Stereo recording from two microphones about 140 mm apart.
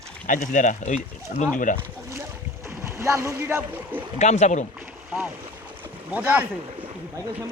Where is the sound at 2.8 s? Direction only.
20° right (ahead or behind).